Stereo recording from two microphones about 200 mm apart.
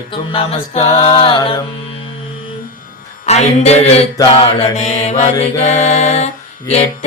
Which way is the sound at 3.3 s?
35° left (ahead or behind).